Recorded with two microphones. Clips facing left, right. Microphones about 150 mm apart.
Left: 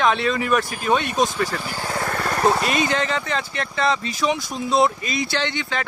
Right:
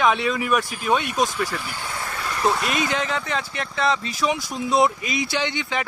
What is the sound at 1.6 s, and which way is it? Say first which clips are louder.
Vehicle: left 5 dB; 40° left (ahead or behind).